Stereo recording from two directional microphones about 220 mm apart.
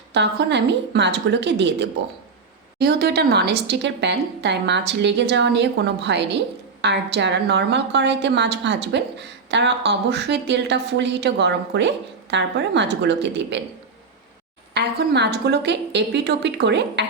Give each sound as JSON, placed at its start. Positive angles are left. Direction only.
{"t": 0.1, "sound": "a woman's voice", "side_deg": -50}
{"t": 14.7, "sound": "a woman's voice", "side_deg": -50}